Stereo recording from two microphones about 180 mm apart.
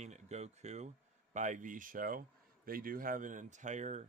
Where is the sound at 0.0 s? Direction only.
40° right (ahead or behind).